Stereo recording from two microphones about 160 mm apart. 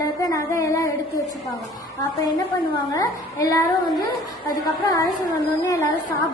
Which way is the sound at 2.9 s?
20° left (ahead or behind).